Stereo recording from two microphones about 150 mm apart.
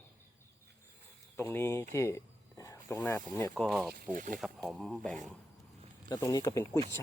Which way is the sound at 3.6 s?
Centre (ahead or behind).